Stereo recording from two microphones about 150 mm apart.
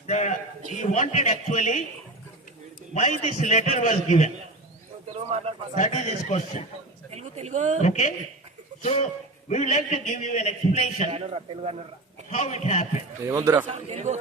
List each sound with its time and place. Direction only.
0.1 s a man's voice: 55° left (ahead or behind)
2.9 s a man's voice: 50° left (ahead or behind)
5.3 s a man's voice: 45° right (ahead or behind)
5.7 s a man's voice: 50° left (ahead or behind)
7.1 s a sound: 45° right (ahead or behind)
7.8 s a man's voice: 50° left (ahead or behind)
11.1 s a man's voice: 40° right (ahead or behind)
12.3 s a man's voice: 50° left (ahead or behind)
13.2 s a man's voice: 20° right (ahead or behind)
13.7 s a man's voice: 50° right (ahead or behind)